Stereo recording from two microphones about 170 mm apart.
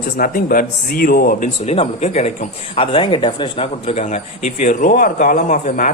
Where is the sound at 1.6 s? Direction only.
35° left (ahead or behind).